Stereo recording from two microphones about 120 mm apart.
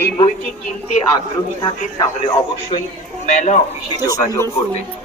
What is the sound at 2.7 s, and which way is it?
Speech, 50° left (ahead or behind).